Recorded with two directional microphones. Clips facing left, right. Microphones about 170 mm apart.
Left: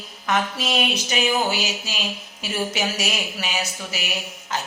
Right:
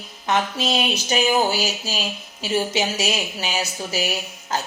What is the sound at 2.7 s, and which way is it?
Speech, 25° right (ahead or behind).